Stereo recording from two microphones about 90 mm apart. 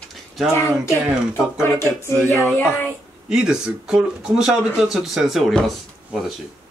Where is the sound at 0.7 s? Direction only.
10° right (ahead or behind).